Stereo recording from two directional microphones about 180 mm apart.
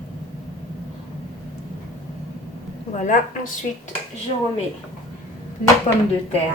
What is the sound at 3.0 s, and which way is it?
Speech, 45° left (ahead or behind).